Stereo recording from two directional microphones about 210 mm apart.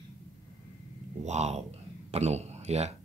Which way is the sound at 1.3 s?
30° right (ahead or behind).